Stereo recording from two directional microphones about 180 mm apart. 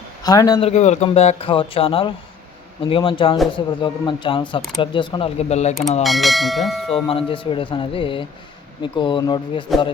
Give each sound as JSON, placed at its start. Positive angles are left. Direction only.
{"t": 0.2, "sound": "speech", "side_deg": 20}
{"t": 0.7, "sound": "speech", "side_deg": 40}
{"t": 6.0, "sound": "speech", "side_deg": 0}
{"t": 7.1, "sound": "speech", "side_deg": 30}